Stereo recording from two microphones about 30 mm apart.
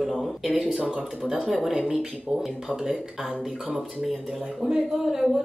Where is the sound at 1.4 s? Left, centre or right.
Centre.